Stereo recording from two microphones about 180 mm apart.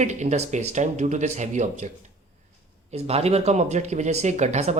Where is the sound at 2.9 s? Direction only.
35° right (ahead or behind).